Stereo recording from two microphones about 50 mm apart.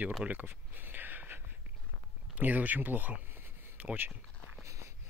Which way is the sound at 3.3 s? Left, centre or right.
Right.